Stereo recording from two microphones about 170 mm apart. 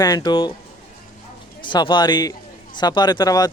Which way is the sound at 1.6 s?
30° left (ahead or behind).